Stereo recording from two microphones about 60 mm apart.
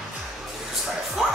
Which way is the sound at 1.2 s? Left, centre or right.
Centre.